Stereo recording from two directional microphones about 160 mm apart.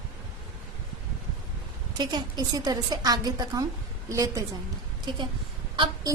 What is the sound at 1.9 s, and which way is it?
A woman's voice, 25° right (ahead or behind).